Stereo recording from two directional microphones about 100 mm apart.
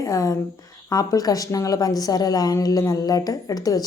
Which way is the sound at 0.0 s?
35° left (ahead or behind).